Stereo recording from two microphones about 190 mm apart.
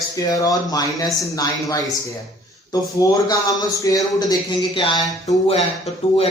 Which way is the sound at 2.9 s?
20° left (ahead or behind).